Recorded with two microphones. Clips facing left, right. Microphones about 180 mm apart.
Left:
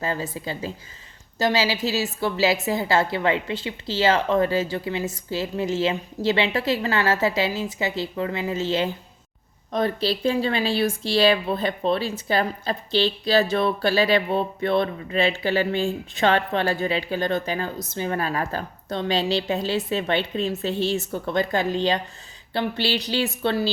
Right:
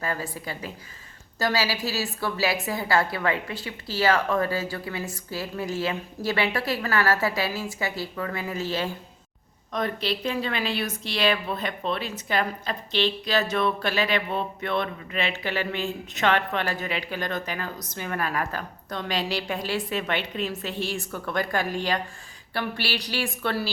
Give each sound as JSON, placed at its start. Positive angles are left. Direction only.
{"t": 0.0, "sound": "speech", "side_deg": 25}